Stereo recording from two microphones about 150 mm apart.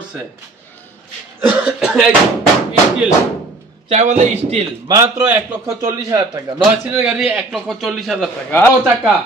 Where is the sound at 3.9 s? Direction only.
50° right (ahead or behind).